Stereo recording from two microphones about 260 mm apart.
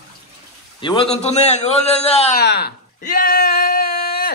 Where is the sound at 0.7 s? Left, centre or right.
Centre.